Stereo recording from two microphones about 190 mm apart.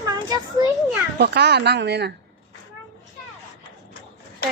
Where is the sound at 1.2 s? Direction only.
60° right (ahead or behind).